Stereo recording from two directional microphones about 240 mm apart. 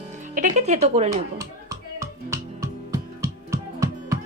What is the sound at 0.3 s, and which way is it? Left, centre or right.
Speech, right.